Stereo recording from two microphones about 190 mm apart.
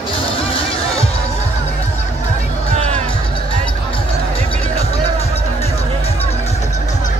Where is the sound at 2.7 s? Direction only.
40° right (ahead or behind).